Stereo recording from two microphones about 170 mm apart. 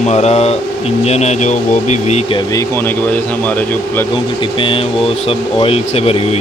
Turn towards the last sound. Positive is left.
turn(degrees=35)  # may be behind; listen again after turning